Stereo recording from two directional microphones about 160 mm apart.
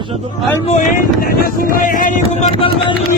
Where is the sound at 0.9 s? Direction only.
65° left (ahead or behind); by 2.7 s 40° left (ahead or behind).